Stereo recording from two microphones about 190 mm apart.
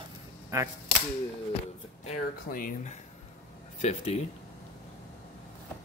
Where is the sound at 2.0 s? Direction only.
45° left (ahead or behind).